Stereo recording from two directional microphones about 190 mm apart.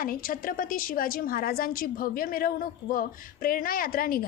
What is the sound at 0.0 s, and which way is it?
A woman's voice, 50° left (ahead or behind).